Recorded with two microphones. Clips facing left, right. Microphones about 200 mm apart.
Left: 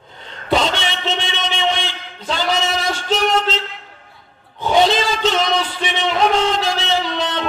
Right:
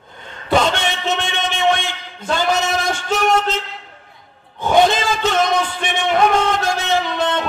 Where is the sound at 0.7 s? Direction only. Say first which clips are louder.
Right 2 dB; 50° right (ahead or behind).